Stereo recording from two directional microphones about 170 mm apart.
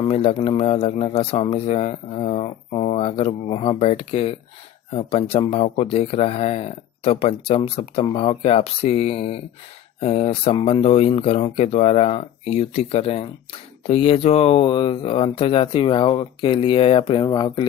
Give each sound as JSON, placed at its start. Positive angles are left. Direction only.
{"t": 0.1, "sound": "speech", "side_deg": 35}